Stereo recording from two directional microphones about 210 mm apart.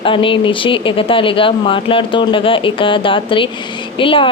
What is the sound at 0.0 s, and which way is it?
Speech, 25° left (ahead or behind).